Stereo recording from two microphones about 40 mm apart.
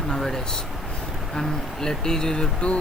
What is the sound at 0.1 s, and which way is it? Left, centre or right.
Speech, centre.